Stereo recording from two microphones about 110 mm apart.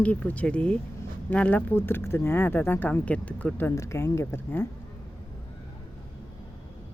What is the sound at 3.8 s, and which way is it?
Speech, 25° left (ahead or behind).